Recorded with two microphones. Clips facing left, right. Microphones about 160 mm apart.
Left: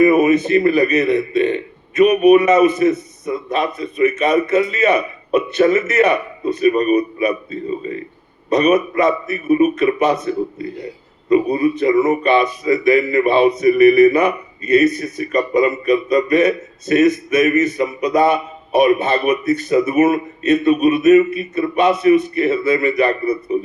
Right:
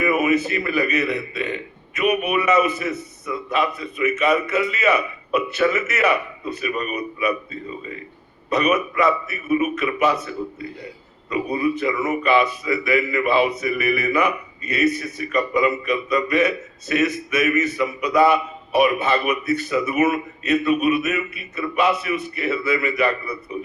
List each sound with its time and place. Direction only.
0.0 s speech: 40° left (ahead or behind)